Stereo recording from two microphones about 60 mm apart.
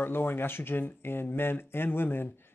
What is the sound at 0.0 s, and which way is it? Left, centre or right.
Speech, left.